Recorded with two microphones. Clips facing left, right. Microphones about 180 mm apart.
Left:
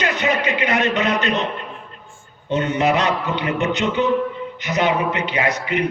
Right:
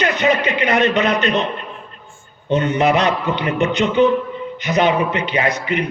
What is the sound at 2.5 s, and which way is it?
Speech, 20° right (ahead or behind).